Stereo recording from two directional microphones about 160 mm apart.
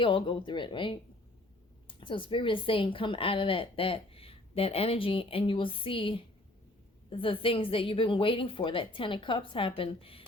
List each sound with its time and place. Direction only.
0.0 s speech: 30° left (ahead or behind)